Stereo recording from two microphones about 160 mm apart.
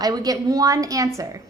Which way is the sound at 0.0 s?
25° right (ahead or behind).